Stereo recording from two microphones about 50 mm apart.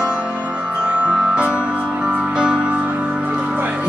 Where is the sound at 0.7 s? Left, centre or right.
Right.